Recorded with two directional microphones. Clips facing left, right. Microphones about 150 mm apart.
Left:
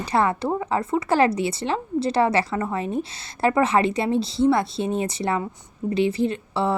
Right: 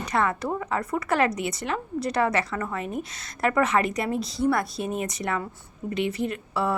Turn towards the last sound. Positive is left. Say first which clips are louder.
# left 3 dB
turn(degrees=25)  # may be behind; listen again after turning